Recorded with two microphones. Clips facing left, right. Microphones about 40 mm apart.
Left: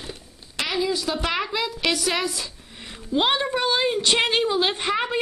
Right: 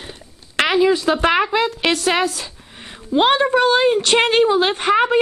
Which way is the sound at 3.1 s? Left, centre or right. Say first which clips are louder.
Right 7 dB; centre.